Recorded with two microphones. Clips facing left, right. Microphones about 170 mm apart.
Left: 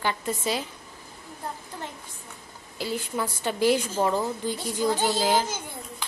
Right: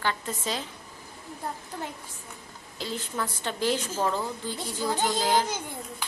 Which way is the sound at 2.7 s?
10° left (ahead or behind).